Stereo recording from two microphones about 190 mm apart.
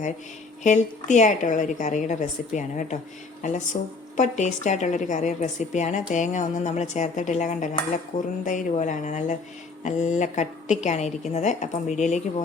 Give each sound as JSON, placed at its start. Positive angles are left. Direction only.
{"t": 0.6, "sound": "a woman's voice", "side_deg": 40}